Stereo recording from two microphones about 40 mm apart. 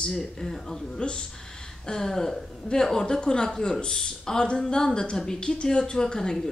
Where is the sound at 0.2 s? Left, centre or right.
Centre.